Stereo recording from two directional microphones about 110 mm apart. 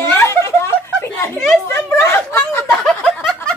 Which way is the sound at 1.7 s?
25° left (ahead or behind).